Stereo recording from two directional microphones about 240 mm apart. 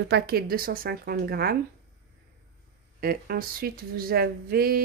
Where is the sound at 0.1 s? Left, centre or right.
Right.